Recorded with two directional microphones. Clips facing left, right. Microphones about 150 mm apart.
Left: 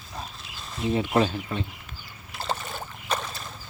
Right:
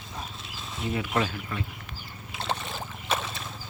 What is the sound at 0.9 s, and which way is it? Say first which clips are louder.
Speech: left 5 dB; 25° left (ahead or behind).